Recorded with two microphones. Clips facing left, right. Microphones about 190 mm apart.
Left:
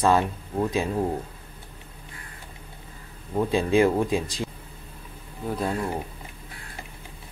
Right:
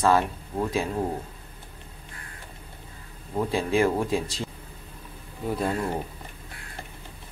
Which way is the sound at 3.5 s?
20° left (ahead or behind).